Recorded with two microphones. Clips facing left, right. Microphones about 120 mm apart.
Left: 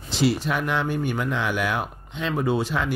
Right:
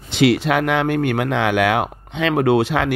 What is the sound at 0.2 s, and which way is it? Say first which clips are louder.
Speech: right 7 dB; 75° right (ahead or behind).